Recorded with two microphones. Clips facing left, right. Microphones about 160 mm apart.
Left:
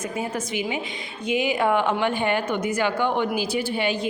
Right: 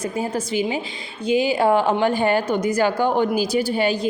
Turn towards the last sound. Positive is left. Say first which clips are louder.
# right 4 dB
turn(degrees=-40)  # may be behind; listen again after turning